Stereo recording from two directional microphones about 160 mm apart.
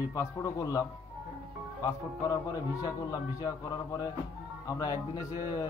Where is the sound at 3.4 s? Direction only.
25° left (ahead or behind).